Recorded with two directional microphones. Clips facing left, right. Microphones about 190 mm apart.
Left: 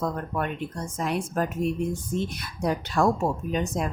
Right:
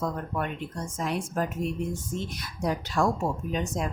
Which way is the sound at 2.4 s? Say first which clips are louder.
Left 2 dB; 60° left (ahead or behind).